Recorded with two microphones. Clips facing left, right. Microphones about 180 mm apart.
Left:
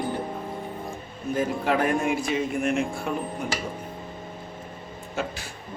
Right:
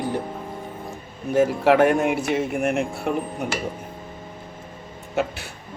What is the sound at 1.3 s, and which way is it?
Speech, 70° right (ahead or behind).